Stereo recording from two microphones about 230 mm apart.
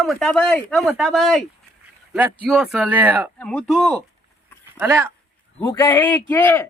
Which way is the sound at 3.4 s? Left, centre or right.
Centre.